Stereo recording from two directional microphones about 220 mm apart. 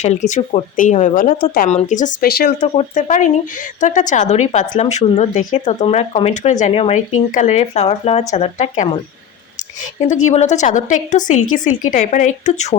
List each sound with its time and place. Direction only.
0.0 s a woman's voice: 30° left (ahead or behind)
10.0 s a woman's voice: 30° left (ahead or behind)